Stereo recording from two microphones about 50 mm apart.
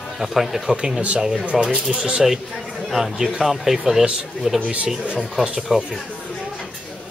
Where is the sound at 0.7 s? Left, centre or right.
Centre.